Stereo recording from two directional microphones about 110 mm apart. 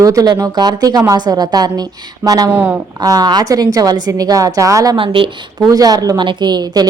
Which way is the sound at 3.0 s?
35° right (ahead or behind).